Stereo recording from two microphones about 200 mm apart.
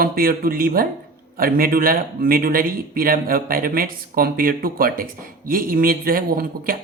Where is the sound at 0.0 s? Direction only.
45° right (ahead or behind).